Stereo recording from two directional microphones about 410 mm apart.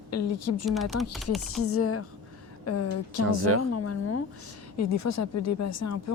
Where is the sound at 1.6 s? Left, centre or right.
Left.